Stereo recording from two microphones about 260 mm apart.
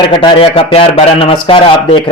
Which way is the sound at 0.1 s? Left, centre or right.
Centre.